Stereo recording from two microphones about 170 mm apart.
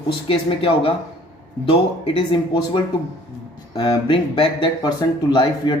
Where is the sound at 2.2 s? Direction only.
30° left (ahead or behind).